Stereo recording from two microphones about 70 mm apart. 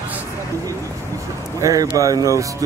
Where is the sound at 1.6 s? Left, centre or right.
Right.